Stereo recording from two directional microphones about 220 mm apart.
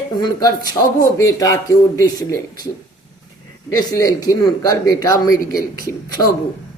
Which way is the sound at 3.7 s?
15° left (ahead or behind).